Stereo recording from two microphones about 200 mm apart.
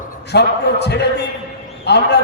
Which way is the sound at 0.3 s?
55° left (ahead or behind).